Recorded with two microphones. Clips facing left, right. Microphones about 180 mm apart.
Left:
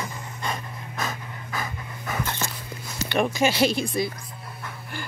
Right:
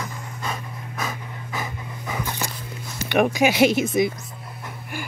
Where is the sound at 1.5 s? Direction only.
15° right (ahead or behind).